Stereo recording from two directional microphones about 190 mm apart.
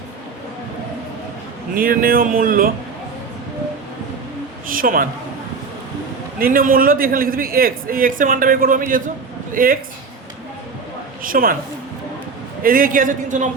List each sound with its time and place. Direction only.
1.7 s a man's voice: 50° right (ahead or behind)
4.7 s a man's voice: 45° right (ahead or behind)
6.4 s a man's voice: 50° right (ahead or behind)
11.2 s a woman's voice: 50° right (ahead or behind)
12.6 s a man's voice: 50° right (ahead or behind)